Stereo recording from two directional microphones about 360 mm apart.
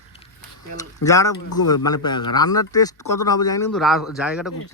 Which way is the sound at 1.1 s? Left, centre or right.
Centre.